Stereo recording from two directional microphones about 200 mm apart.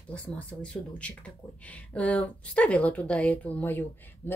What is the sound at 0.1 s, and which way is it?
Speech, 5° left (ahead or behind).